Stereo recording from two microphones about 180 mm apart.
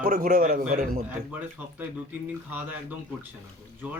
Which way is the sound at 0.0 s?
55° right (ahead or behind).